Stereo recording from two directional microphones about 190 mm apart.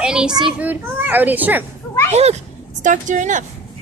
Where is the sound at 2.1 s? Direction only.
35° right (ahead or behind).